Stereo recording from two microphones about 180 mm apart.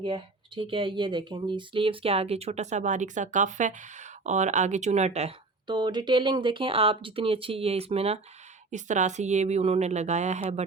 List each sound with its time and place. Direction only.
0.0 s speech: 30° right (ahead or behind)
5.6 s speech: 25° right (ahead or behind); by 10.6 s 40° right (ahead or behind)